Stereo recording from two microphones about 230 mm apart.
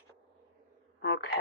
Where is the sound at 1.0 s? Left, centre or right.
Left.